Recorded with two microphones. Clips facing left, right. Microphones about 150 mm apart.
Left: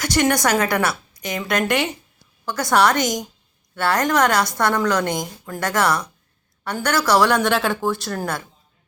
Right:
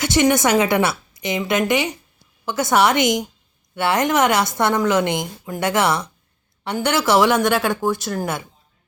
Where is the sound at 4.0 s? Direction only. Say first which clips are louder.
Right 1 dB; 20° right (ahead or behind).